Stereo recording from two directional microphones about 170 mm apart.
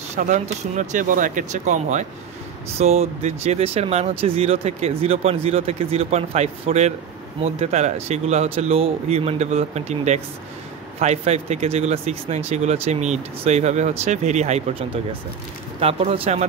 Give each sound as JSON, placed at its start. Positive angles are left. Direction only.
{"t": 0.2, "sound": "speech", "side_deg": -50}